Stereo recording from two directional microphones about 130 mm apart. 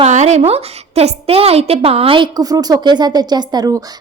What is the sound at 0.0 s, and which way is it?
A woman's voice, 65° right (ahead or behind).